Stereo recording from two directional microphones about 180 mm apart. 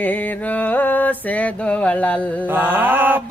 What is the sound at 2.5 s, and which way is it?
Speech, 10° right (ahead or behind).